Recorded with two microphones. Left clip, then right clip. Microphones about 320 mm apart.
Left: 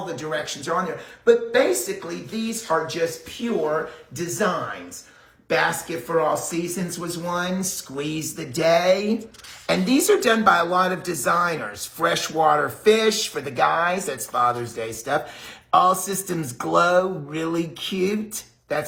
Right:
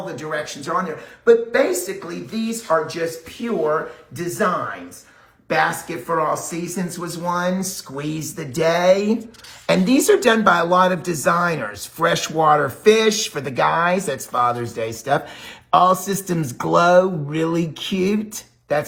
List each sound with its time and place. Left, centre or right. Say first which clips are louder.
0.2 s speech: right 1 dB; centre
5.9 s speech: right 1 dB; centre
7.9 s speech: right 1 dB; centre